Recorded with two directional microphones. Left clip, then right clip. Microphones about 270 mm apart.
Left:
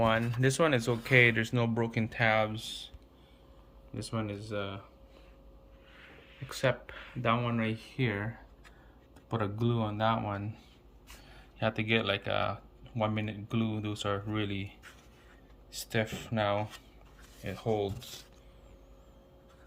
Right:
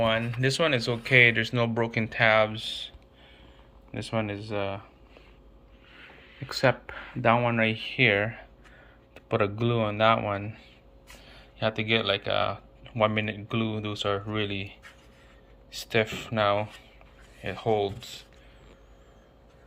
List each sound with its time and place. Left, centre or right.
0.0 s speech: centre
3.9 s speech: centre
6.5 s speech: centre
9.1 s speech: centre